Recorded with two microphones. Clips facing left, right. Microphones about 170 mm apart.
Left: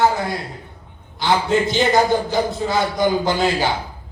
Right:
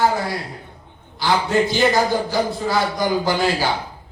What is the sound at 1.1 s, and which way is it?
Speech, 20° left (ahead or behind).